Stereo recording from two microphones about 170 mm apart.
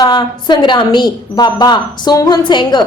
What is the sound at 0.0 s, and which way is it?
A woman's voice, 25° left (ahead or behind).